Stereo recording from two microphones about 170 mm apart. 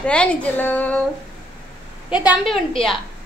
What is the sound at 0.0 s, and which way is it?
A woman's voice, 5° left (ahead or behind).